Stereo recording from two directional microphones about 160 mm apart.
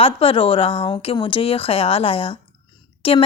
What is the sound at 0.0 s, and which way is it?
A woman's voice, 35° left (ahead or behind).